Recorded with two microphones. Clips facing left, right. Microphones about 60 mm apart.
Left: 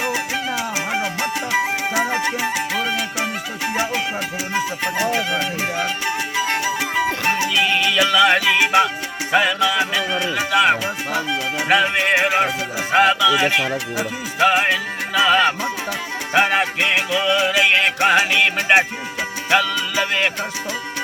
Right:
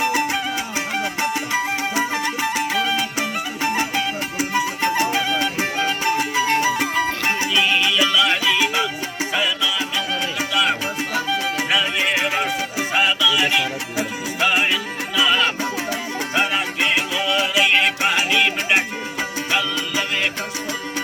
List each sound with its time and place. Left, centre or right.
2.0 s music: centre
6.7 s music: centre
7.6 s music: left
8.1 s music: left
12.9 s music: left
13.1 s music: left